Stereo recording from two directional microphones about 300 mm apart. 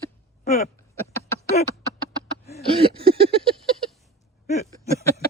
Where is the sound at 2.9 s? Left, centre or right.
Centre.